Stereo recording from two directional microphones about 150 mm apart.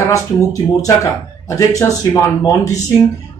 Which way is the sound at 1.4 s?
20° left (ahead or behind).